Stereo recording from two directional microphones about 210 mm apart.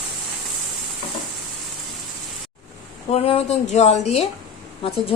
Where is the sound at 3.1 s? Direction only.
30° left (ahead or behind).